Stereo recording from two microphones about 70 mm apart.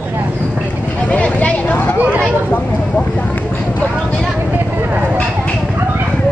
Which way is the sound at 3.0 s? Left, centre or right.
Left.